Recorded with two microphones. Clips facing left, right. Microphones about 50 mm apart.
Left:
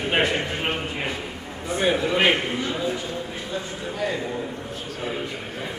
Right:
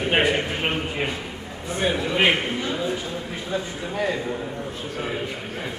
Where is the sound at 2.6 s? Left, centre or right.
Centre.